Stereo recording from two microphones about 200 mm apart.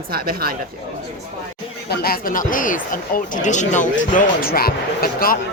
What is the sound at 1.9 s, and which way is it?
Speech, 50° left (ahead or behind).